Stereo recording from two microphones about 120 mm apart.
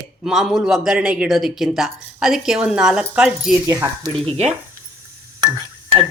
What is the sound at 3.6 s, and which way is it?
Speech, 30° right (ahead or behind).